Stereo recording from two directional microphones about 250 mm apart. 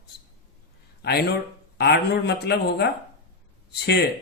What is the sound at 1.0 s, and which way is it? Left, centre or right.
Speech, left.